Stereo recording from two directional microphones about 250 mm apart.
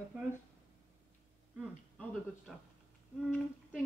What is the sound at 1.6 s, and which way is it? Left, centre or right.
Speech, centre.